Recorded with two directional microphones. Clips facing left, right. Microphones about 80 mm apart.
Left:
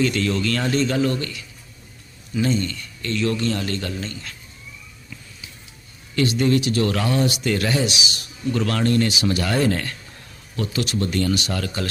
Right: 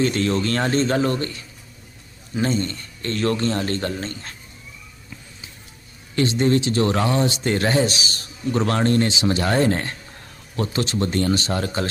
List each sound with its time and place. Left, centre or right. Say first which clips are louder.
0.0 s speech: right 1 dB; right
6.1 s speech: even; right